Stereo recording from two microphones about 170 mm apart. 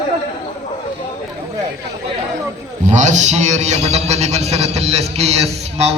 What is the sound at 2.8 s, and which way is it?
A man's voice, 45° right (ahead or behind).